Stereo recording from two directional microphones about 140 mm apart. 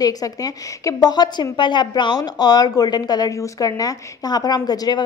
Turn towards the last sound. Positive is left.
turn(degrees=30)  # may be behind; listen again after turning